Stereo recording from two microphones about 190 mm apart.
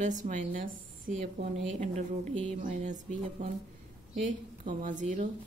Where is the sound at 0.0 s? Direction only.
40° right (ahead or behind).